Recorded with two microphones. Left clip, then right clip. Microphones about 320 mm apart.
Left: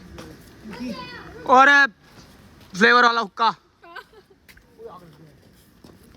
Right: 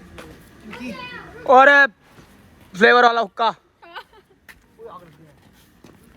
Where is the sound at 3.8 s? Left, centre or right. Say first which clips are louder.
Right 2 dB; centre.